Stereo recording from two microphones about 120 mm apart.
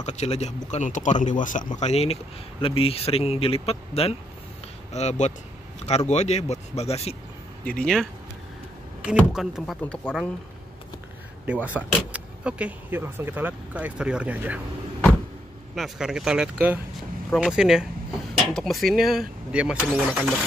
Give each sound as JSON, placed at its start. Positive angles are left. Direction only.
{"t": 0.0, "sound": "speech", "side_deg": 70}
{"t": 0.7, "sound": "a man's voice", "side_deg": 80}
{"t": 4.9, "sound": "speech", "side_deg": 70}
{"t": 7.6, "sound": "speech", "side_deg": 5}
{"t": 11.4, "sound": "speech", "side_deg": -10}
{"t": 15.7, "sound": "speech", "side_deg": 0}